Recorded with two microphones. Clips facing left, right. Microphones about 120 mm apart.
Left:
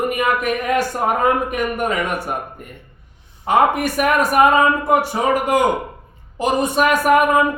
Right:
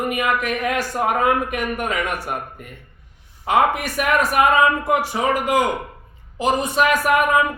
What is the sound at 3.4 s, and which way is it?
Speech, 50° left (ahead or behind).